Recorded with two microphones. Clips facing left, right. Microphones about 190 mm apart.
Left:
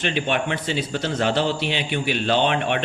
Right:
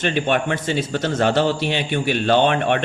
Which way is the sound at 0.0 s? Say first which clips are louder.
Right 3 dB; 50° right (ahead or behind).